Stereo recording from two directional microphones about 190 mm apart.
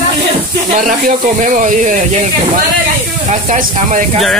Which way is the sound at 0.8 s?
45° right (ahead or behind).